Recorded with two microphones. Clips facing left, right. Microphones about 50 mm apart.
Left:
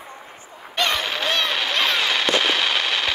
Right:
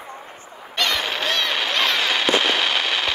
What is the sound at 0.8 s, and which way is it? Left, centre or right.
Honk, centre.